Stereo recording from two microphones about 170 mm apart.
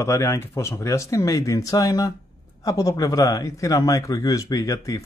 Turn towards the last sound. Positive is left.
turn(degrees=20)  # may be behind; listen again after turning